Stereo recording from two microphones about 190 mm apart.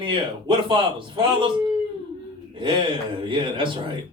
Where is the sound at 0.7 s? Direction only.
25° right (ahead or behind).